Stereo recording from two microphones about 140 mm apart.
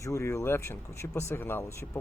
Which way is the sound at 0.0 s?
20° left (ahead or behind).